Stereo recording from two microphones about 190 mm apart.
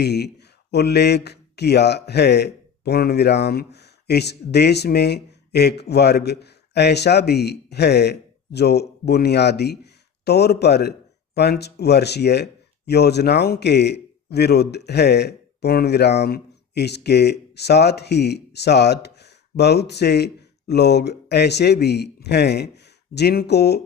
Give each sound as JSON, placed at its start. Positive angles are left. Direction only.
{"t": 0.0, "sound": "speech", "side_deg": 60}